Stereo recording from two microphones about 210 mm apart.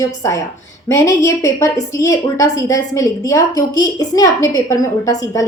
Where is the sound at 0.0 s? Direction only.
15° left (ahead or behind).